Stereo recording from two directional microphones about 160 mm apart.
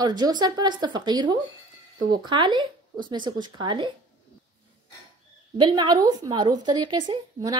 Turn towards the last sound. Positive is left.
turn(degrees=-25)  # may be behind; listen again after turning